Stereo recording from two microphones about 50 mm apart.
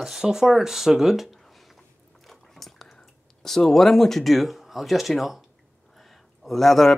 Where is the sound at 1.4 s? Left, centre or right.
Centre.